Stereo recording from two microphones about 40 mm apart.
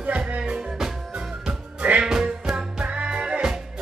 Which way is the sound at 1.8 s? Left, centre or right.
Right.